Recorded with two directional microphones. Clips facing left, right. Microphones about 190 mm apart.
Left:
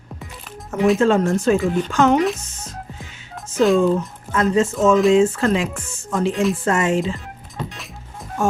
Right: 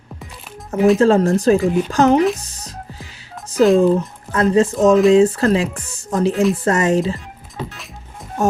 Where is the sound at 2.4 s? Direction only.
35° right (ahead or behind).